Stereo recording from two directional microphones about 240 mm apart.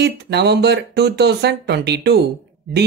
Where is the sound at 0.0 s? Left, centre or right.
Right.